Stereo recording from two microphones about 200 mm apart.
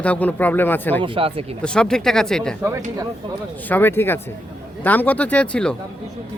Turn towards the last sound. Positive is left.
turn(degrees=5)  # may be behind; listen again after turning